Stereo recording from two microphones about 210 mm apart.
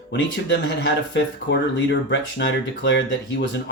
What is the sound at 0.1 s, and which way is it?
Speech, 55° left (ahead or behind).